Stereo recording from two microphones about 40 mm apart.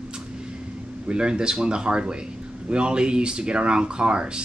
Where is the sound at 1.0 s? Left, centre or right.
Right.